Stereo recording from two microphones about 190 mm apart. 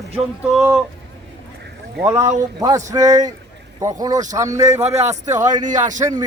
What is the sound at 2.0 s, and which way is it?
Speech, 15° right (ahead or behind).